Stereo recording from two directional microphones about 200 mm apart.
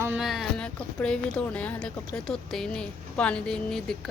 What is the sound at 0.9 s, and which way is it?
Speech, 5° left (ahead or behind).